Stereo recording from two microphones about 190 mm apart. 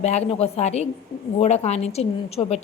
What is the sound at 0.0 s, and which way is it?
A woman's voice, 35° left (ahead or behind).